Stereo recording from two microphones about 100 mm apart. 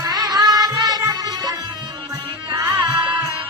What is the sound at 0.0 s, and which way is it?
Music, 40° right (ahead or behind).